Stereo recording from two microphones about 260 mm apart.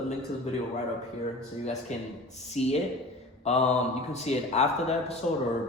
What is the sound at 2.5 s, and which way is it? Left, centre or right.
A man's voice, left.